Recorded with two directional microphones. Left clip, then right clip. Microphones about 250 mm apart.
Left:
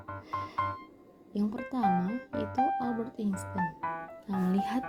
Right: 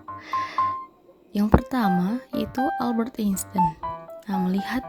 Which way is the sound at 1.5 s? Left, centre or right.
Right.